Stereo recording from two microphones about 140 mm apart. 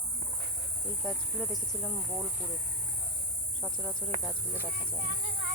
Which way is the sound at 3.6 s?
5° left (ahead or behind).